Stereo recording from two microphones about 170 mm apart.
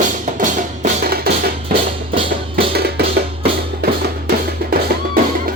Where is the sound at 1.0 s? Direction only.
65° right (ahead or behind).